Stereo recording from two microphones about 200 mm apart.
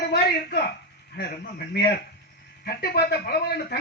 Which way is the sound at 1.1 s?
50° left (ahead or behind).